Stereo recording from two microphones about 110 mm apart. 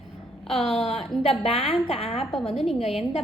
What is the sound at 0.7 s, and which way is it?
A woman's voice, 65° left (ahead or behind).